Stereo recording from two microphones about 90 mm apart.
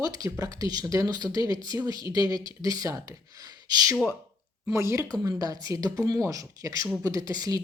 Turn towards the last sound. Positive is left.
turn(degrees=-45)  # may be behind; listen again after turning